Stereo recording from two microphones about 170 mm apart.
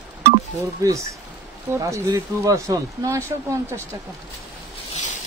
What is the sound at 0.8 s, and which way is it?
Speech, 20° right (ahead or behind).